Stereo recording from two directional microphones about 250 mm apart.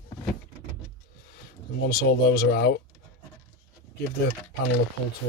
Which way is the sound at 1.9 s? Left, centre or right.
Left.